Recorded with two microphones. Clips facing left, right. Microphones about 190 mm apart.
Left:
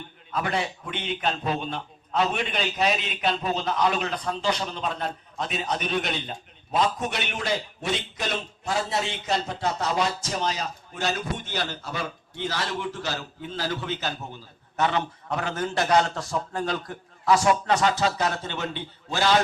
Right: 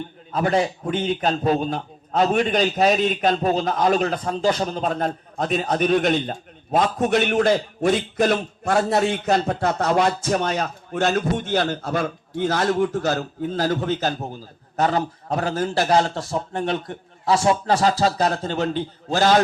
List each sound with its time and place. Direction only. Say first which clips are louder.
0.3 s a man's voice: right 7 dB; 40° right (ahead or behind)